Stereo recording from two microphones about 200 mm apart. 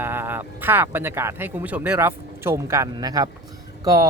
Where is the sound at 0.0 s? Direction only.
10° right (ahead or behind).